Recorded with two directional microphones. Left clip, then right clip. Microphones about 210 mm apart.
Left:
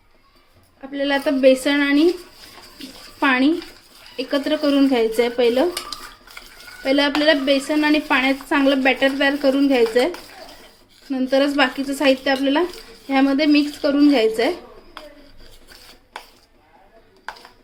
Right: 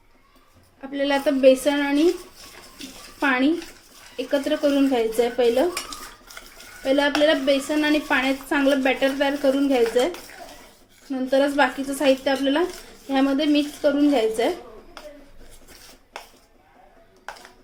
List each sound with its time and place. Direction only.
0.8 s speech: 5° right (ahead or behind); by 2.0 s 15° left (ahead or behind)
3.2 s speech: 15° left (ahead or behind)
6.8 s speech: 15° left (ahead or behind)
11.1 s speech: 15° left (ahead or behind)